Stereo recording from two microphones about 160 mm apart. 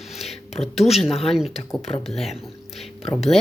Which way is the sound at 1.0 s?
Centre (ahead or behind).